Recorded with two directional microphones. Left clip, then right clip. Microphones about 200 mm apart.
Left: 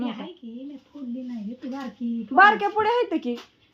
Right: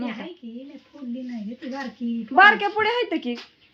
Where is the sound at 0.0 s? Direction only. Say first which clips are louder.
Even; 10° left (ahead or behind).